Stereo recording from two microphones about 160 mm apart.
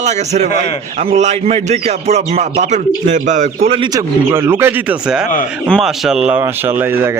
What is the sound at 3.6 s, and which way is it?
Bird, 30° right (ahead or behind).